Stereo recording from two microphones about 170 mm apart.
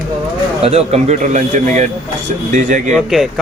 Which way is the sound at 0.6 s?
35° right (ahead or behind).